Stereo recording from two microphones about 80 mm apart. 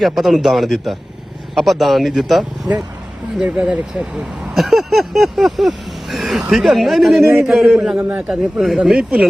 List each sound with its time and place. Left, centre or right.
0.0 s vehicle: centre
3.4 s speech: centre
4.5 s vehicle: centre
7.4 s speech: centre
7.9 s a man's voice: right
8.3 s speech: centre